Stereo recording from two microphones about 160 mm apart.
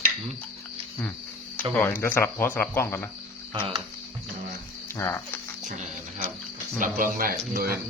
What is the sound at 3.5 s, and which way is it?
Speech, 35° right (ahead or behind).